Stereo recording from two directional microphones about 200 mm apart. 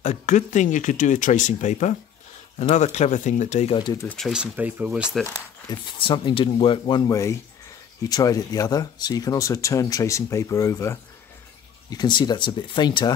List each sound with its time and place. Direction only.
0.0 s speech: 35° left (ahead or behind); by 4.1 s 20° left (ahead or behind)
4.1 s speech: centre (ahead or behind)
5.2 s speech: 25° left (ahead or behind)